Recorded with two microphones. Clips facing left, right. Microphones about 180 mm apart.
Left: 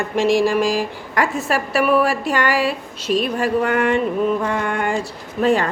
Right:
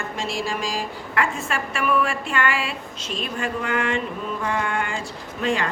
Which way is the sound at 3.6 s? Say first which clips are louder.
Left 6 dB; 55° left (ahead or behind).